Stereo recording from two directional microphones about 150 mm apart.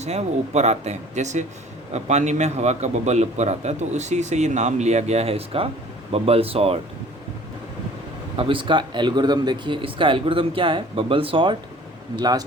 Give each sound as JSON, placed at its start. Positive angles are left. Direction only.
{"t": 0.0, "sound": "a man's voice", "side_deg": -45}
{"t": 8.4, "sound": "a man's voice", "side_deg": -35}